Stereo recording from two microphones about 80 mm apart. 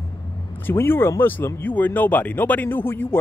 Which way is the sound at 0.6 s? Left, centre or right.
Left.